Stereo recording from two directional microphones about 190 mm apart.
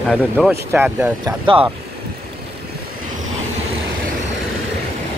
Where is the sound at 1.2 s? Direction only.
25° right (ahead or behind).